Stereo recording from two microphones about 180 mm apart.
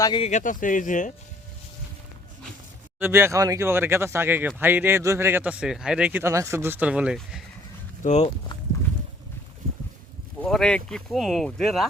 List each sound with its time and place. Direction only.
0.0 s speech: 25° left (ahead or behind)
0.3 s speech: 45° left (ahead or behind)
3.0 s speech: 15° right (ahead or behind)
8.0 s speech: 40° left (ahead or behind)
10.4 s speech: 5° left (ahead or behind)